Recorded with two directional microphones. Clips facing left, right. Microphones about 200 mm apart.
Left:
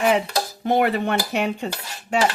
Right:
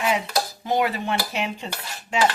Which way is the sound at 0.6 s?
60° left (ahead or behind).